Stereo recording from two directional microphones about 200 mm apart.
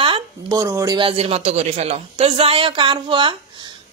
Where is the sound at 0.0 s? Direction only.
20° right (ahead or behind).